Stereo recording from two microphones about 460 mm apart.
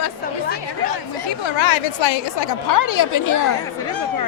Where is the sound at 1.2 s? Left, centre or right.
Left.